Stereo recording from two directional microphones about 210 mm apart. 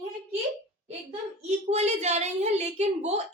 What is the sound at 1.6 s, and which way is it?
A woman's voice, 30° right (ahead or behind).